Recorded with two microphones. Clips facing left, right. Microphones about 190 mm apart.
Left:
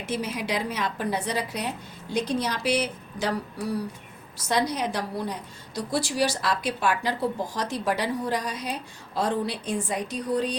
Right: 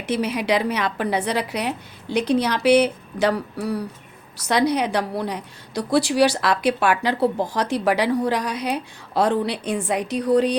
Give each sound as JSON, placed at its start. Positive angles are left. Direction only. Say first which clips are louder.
{"t": 0.1, "sound": "a woman's voice", "louder": "right 8 dB", "side_deg": -70}